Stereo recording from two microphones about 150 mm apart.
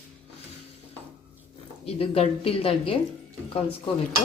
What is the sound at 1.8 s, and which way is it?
Speech, 40° left (ahead or behind).